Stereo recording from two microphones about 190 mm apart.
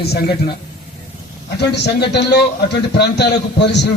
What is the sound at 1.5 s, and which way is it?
A man's voice, 60° left (ahead or behind).